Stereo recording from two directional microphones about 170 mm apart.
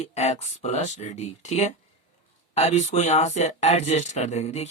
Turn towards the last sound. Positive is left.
turn(degrees=40)  # may be behind; listen again after turning